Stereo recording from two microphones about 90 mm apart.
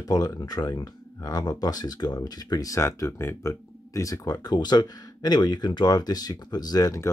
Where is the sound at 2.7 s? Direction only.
30° left (ahead or behind).